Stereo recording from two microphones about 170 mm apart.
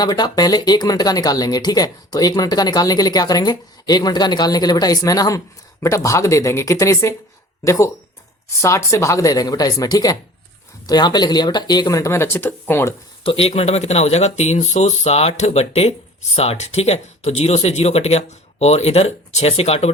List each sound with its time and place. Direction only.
0.0 s speech: 25° left (ahead or behind)
13.2 s speech: 35° left (ahead or behind)